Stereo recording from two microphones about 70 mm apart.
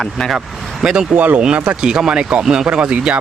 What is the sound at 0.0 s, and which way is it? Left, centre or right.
Speech, centre.